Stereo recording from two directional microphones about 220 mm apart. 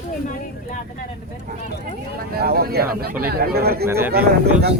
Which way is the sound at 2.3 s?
45° right (ahead or behind).